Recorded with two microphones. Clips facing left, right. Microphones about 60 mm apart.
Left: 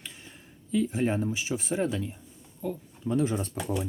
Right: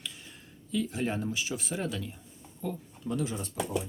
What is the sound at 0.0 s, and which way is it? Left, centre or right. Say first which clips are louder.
Speech: right 1 dB; left.